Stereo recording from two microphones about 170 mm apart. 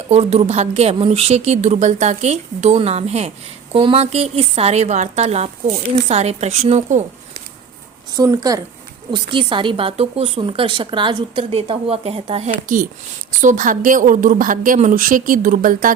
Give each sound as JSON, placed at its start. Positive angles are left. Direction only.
{"t": 0.1, "sound": "a woman's voice", "side_deg": -40}
{"t": 8.1, "sound": "a woman's voice", "side_deg": -20}
{"t": 12.6, "sound": "a woman's voice", "side_deg": -50}